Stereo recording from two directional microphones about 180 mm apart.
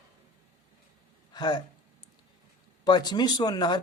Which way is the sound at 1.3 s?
25° left (ahead or behind).